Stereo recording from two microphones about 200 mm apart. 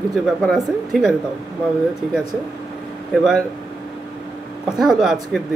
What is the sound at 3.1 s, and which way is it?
Speech, centre (ahead or behind).